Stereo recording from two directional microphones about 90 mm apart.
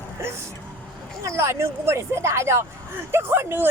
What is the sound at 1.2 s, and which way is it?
Speech, 35° right (ahead or behind).